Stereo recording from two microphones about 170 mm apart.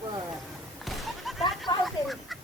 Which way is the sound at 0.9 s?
Centre (ahead or behind).